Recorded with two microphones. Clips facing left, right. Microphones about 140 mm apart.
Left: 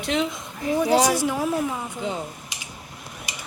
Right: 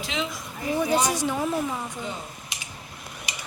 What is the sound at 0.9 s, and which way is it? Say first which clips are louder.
Speech: left 6 dB; 75° left (ahead or behind).